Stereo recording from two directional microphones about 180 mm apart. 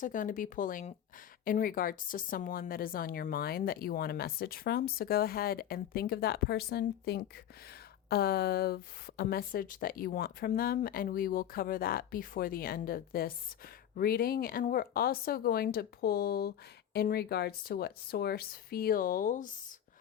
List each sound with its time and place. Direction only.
0.0 s a woman's voice: 45° left (ahead or behind)